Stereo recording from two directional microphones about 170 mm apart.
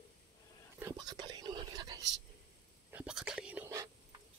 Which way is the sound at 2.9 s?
5° right (ahead or behind).